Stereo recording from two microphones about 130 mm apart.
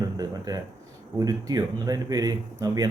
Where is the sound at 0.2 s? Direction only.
30° right (ahead or behind).